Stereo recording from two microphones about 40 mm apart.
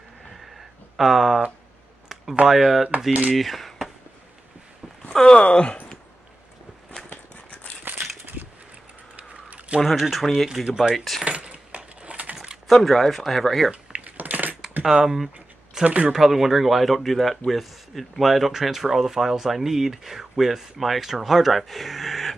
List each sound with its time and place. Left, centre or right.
0.3 s a sound: centre
2.4 s speech: centre
3.1 s speech: right
3.3 s speech: centre
5.2 s speech: left
7.1 s a sound: left
7.8 s crushing: right
9.9 s speech: centre
10.5 s speech: centre
11.2 s keys jangling: right
12.6 s speech: centre
13.7 s typing: right
14.8 s speech: centre